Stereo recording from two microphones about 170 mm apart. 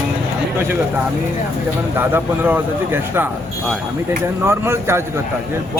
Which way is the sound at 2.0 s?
10° right (ahead or behind).